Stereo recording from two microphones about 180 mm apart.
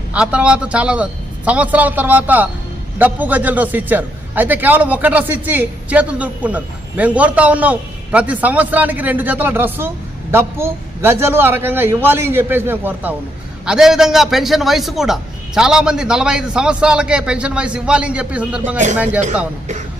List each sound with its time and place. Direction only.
0.1 s a man's voice: 5° right (ahead or behind)